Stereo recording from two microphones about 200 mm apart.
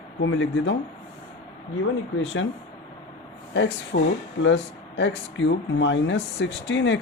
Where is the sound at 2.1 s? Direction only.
70° left (ahead or behind).